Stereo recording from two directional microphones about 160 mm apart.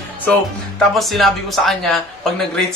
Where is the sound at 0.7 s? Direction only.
Centre (ahead or behind).